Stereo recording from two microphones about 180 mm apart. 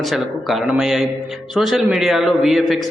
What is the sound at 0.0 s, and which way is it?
A man's voice, centre (ahead or behind).